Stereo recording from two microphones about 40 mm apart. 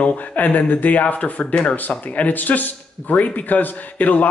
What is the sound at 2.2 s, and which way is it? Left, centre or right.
A man's voice, left.